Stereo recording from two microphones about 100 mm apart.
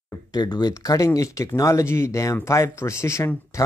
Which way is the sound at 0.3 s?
40° left (ahead or behind).